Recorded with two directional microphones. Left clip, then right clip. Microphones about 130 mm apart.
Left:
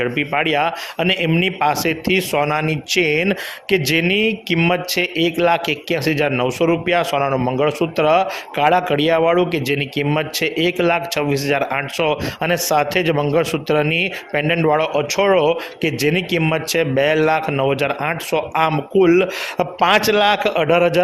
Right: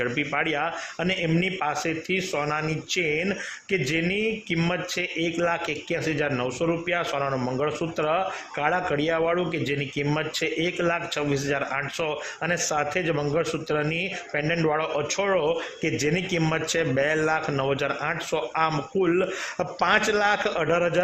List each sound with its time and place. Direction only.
0.0 s speech: 20° left (ahead or behind)